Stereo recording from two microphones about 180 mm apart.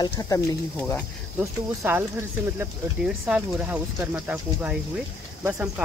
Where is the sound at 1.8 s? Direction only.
10° right (ahead or behind).